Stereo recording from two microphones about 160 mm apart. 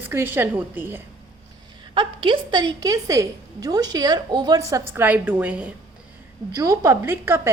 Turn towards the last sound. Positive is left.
turn(degrees=-15)  # may be behind; listen again after turning